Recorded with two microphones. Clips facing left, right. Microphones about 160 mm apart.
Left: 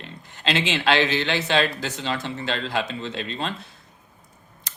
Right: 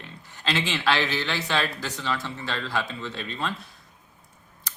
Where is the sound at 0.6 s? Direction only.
20° left (ahead or behind).